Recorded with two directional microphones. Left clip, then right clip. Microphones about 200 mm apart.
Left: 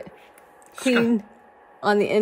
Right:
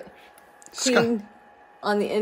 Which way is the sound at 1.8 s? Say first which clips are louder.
Left 4 dB; 55° left (ahead or behind).